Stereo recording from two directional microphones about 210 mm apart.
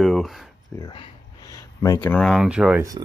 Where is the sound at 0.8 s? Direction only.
20° left (ahead or behind); by 2.8 s 5° right (ahead or behind).